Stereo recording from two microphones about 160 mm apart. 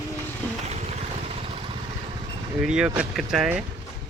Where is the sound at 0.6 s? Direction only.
40° right (ahead or behind).